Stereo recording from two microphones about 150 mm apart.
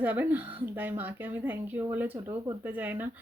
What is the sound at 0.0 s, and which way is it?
Speech, 10° right (ahead or behind).